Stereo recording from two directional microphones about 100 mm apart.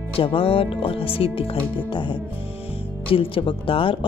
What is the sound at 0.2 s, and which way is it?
A woman's voice, 65° left (ahead or behind).